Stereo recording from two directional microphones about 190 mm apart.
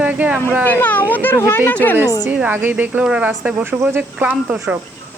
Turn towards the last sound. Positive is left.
turn(degrees=-5)  # may be behind; listen again after turning